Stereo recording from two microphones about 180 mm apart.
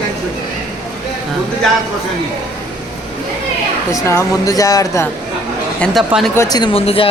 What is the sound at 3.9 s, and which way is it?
Speech, 15° left (ahead or behind).